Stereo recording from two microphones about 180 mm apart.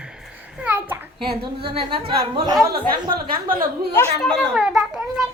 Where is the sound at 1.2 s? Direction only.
30° right (ahead or behind).